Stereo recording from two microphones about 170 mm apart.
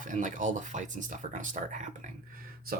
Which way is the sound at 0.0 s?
50° right (ahead or behind).